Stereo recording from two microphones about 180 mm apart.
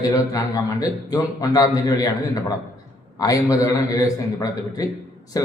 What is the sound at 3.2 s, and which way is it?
A man's voice, 20° left (ahead or behind).